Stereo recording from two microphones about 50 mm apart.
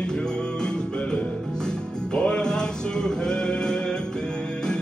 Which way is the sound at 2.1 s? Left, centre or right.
Centre.